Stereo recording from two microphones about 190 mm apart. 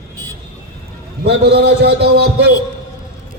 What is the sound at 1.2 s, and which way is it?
A man's voice, 60° right (ahead or behind).